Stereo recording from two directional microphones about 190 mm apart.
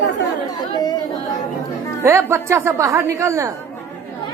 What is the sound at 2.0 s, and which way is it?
A woman's voice, 15° right (ahead or behind).